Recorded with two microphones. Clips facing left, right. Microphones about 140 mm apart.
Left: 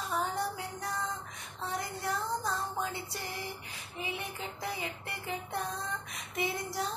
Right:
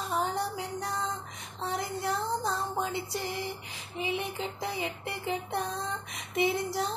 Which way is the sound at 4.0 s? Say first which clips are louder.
Right 6 dB; 25° right (ahead or behind).